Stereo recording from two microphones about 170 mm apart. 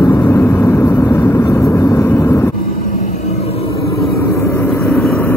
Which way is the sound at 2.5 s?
60° left (ahead or behind).